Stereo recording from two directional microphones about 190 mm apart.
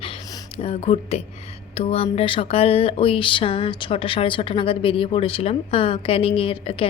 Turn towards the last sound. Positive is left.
turn(degrees=30)  # may be behind; listen again after turning